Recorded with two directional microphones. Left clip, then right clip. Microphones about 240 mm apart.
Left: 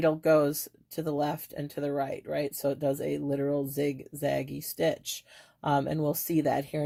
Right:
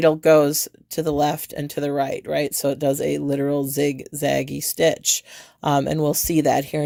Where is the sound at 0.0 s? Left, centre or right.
Right.